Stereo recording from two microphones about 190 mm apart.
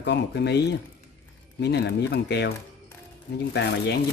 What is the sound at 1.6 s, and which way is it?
Speech, 65° left (ahead or behind).